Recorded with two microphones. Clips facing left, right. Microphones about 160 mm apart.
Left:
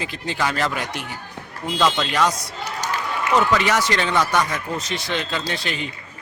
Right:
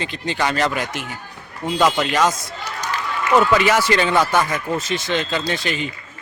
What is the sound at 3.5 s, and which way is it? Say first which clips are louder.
Speech: right 3 dB; 5° right (ahead or behind).